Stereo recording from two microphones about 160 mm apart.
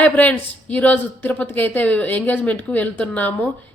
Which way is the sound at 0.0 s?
10° left (ahead or behind).